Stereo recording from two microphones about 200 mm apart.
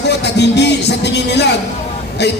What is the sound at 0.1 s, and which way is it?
A man's voice, 60° left (ahead or behind).